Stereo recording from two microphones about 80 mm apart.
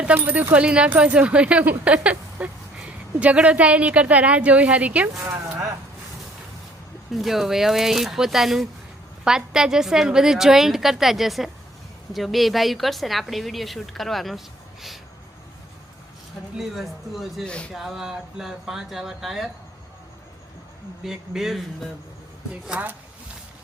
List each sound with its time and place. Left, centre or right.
0.0 s speech: right
7.1 s a woman's voice: centre
16.6 s a woman's voice: centre
17.4 s speech: centre
17.7 s a woman's voice: centre
21.0 s a woman's voice: centre